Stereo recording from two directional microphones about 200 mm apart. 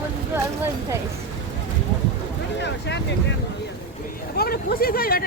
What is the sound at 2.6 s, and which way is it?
Vehicle, 60° left (ahead or behind).